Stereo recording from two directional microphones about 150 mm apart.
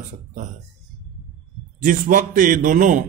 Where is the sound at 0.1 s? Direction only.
55° right (ahead or behind).